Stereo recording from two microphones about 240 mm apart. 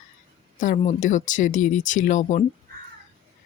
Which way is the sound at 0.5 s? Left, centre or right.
Left.